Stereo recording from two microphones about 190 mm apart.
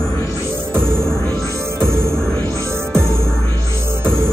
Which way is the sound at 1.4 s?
15° right (ahead or behind).